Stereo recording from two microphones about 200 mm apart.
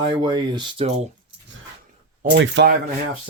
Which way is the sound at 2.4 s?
60° right (ahead or behind).